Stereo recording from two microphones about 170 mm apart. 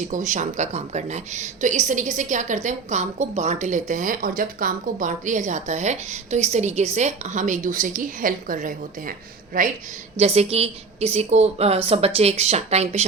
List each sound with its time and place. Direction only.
0.1 s speech: 45° right (ahead or behind)
10.2 s a woman's voice: 35° right (ahead or behind)